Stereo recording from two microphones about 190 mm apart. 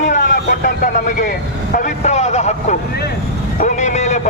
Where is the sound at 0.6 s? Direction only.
45° left (ahead or behind).